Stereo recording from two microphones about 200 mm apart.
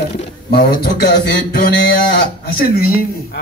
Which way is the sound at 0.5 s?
50° left (ahead or behind).